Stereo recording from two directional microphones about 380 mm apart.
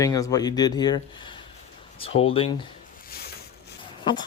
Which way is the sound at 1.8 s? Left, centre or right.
Centre.